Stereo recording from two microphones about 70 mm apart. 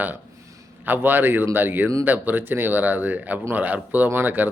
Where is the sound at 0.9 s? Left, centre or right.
Right.